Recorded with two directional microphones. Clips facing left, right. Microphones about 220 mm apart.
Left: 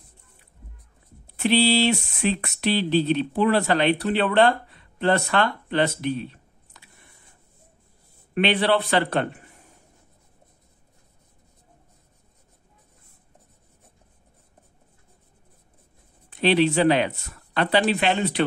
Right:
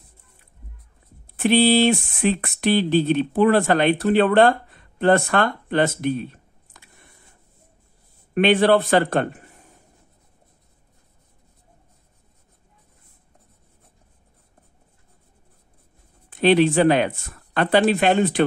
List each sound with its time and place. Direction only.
1.2 s speech: 50° right (ahead or behind)
8.4 s speech: 45° right (ahead or behind)
16.3 s speech: 50° right (ahead or behind)